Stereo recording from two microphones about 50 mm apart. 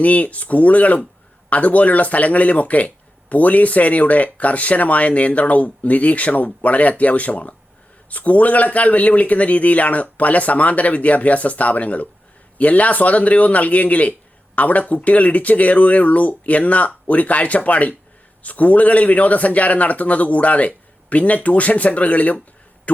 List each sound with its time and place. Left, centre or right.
0.0 s speech: left